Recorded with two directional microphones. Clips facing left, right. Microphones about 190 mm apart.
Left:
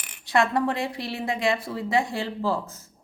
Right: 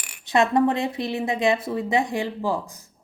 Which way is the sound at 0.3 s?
20° right (ahead or behind).